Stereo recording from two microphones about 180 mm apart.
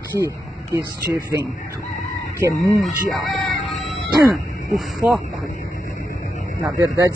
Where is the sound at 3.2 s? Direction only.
Centre (ahead or behind).